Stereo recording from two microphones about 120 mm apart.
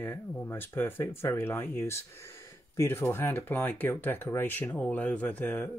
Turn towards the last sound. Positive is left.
turn(degrees=15)  # may be behind; listen again after turning